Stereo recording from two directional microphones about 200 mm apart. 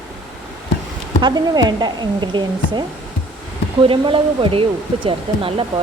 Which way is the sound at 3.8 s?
25° right (ahead or behind).